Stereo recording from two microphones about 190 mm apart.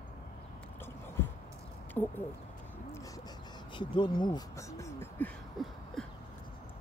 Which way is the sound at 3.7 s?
25° left (ahead or behind).